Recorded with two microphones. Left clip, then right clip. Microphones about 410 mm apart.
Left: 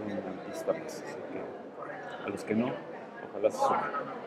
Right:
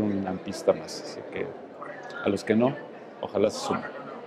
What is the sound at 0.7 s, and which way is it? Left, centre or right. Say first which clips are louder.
Speech: right 9 dB; right.